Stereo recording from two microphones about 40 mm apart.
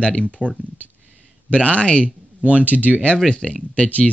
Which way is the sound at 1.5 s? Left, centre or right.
Left.